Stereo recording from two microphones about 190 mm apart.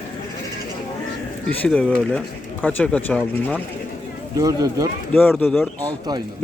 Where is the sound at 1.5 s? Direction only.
5° left (ahead or behind).